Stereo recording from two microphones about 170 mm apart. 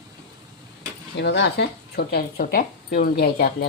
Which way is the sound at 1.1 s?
90° left.